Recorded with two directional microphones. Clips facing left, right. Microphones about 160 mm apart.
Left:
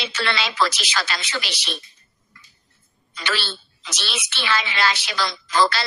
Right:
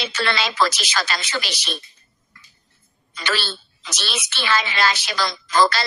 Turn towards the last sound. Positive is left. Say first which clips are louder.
# right 2 dB
turn(degrees=-45)  # may be behind; listen again after turning